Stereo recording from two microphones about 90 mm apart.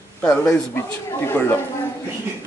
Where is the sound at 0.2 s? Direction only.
10° left (ahead or behind).